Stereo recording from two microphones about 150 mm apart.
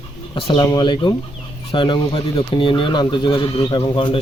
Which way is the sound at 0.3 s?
35° left (ahead or behind).